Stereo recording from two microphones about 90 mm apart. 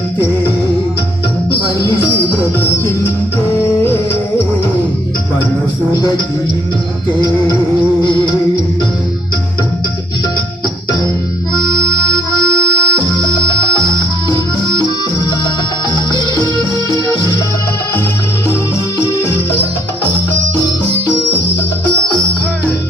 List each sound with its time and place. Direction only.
3.8 s music: 25° left (ahead or behind)
11.5 s music: 50° left (ahead or behind)